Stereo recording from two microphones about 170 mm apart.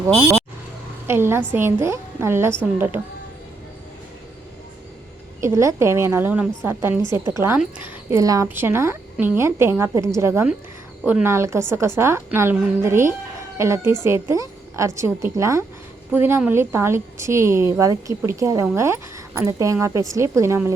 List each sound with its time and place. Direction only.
1.0 s a woman's voice: 15° right (ahead or behind)
5.4 s a woman's voice: 15° right (ahead or behind)